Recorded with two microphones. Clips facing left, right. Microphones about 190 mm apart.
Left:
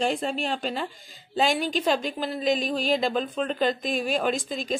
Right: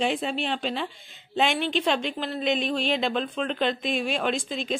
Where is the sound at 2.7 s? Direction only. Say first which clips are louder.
Left 1 dB; centre (ahead or behind).